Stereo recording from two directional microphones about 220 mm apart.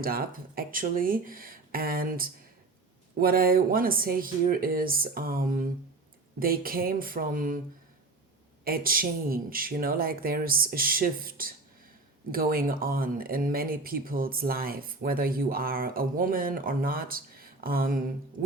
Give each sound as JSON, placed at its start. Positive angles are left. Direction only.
{"t": 0.0, "sound": "speech", "side_deg": -40}
{"t": 8.6, "sound": "speech", "side_deg": -40}